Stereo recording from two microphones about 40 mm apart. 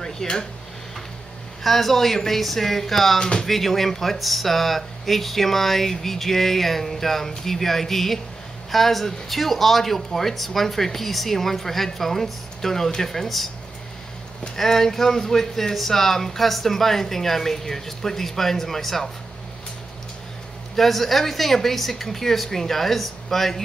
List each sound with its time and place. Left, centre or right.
0.0 s a sound: centre
1.6 s speech: centre
3.2 s speech: centre
3.4 s speech: centre
14.6 s speech: centre
20.7 s speech: centre